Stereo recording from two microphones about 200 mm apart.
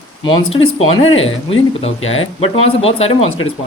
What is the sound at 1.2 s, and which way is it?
Speech, 30° left (ahead or behind).